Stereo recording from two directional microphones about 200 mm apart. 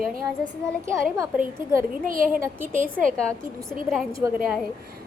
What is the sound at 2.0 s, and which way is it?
Speech, 45° right (ahead or behind).